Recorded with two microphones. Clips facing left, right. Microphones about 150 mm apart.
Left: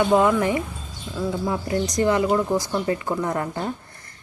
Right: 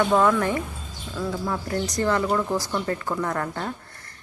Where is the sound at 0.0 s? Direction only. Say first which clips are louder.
Left 2 dB; 15° left (ahead or behind).